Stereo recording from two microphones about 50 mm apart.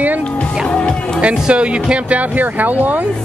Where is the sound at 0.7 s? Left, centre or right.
Left.